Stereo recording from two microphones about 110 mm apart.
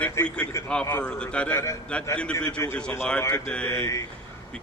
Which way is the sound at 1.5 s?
25° left (ahead or behind).